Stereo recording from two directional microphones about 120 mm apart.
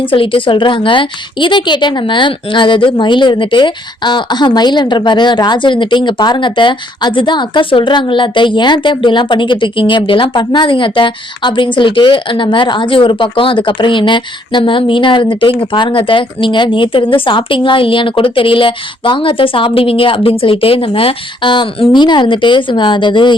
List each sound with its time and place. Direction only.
0.0 s a woman's voice: 45° left (ahead or behind)